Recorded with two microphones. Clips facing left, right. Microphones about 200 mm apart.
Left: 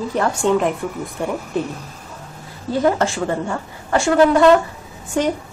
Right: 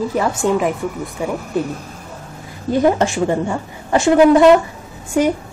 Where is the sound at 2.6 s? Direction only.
15° right (ahead or behind).